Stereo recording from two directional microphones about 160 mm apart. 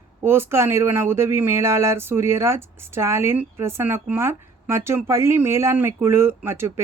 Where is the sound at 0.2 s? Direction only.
15° right (ahead or behind).